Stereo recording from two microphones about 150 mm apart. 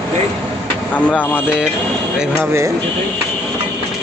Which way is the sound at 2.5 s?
20° right (ahead or behind).